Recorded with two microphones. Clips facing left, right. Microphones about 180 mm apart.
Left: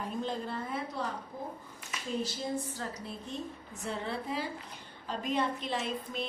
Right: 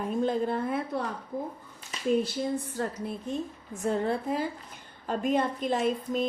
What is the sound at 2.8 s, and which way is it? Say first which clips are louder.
A woman's voice: right 8 dB; 55° right (ahead or behind).